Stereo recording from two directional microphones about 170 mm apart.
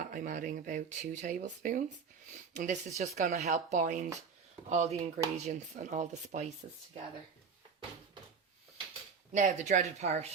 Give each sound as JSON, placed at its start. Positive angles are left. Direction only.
{"t": 0.0, "sound": "speech", "side_deg": -50}
{"t": 9.3, "sound": "speech", "side_deg": -45}